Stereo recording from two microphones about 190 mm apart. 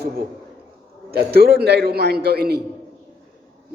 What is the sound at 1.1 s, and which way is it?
A man's voice, 55° right (ahead or behind).